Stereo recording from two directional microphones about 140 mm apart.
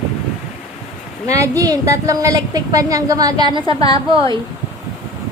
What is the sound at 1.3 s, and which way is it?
A woman's voice, 25° right (ahead or behind).